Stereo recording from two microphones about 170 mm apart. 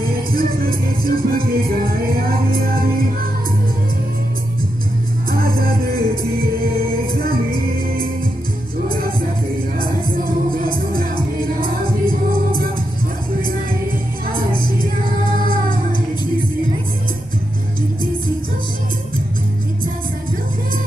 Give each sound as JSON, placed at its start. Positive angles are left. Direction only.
{"t": 0.0, "sound": "music", "side_deg": -60}
{"t": 5.3, "sound": "music", "side_deg": -60}
{"t": 15.2, "sound": "music", "side_deg": -55}